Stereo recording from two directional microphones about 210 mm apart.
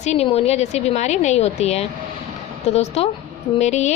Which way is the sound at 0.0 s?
30° left (ahead or behind).